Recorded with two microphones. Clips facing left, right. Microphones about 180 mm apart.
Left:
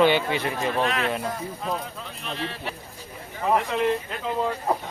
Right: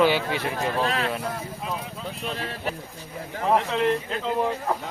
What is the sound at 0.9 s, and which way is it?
Speech, 35° right (ahead or behind).